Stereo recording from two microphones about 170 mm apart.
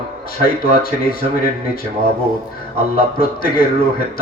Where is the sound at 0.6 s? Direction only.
60° left (ahead or behind).